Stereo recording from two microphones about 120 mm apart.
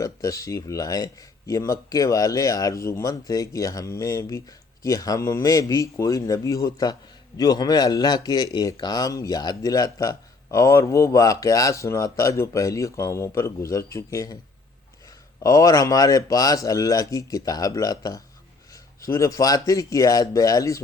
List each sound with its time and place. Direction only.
0.0 s a man's voice: 30° left (ahead or behind)
15.4 s speech: 30° left (ahead or behind)